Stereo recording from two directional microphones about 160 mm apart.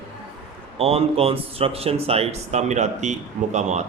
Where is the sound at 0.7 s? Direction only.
40° right (ahead or behind).